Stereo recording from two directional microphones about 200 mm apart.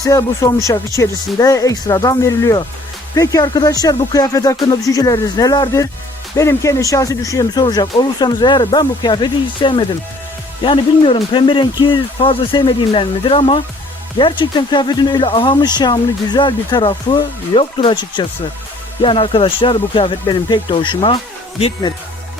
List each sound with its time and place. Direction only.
0.0 s speech: 15° left (ahead or behind)